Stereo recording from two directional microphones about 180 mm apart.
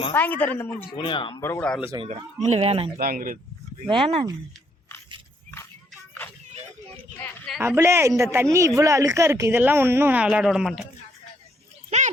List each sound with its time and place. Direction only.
0.1 s a woman's voice: 10° left (ahead or behind)
0.9 s speech: 25° left (ahead or behind)
1.4 s a woman's voice: 15° left (ahead or behind)
2.1 s speech: 35° right (ahead or behind)
3.0 s speech: 50° right (ahead or behind)
3.8 s speech: 30° right (ahead or behind)
6.9 s a sound: 5° left (ahead or behind)
7.6 s speech: 15° right (ahead or behind)
11.9 s a sound: 40° right (ahead or behind)